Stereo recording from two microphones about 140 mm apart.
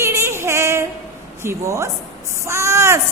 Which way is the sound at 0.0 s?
20° right (ahead or behind).